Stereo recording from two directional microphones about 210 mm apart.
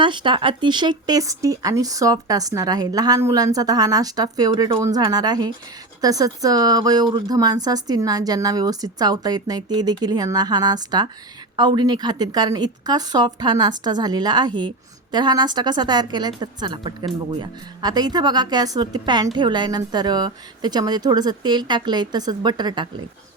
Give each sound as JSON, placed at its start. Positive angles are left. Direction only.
{"t": 0.0, "sound": "a woman's voice", "side_deg": -20}